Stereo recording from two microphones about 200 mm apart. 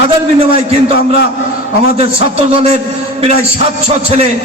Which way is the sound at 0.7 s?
30° right (ahead or behind).